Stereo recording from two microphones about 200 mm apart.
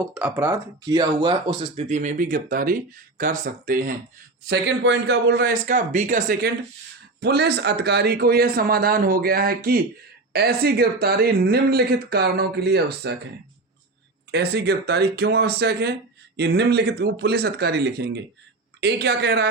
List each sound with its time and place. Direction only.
0.1 s speech: 10° right (ahead or behind); by 3.9 s 45° right (ahead or behind)
4.4 s speech: 60° right (ahead or behind)
14.3 s speech: 55° right (ahead or behind)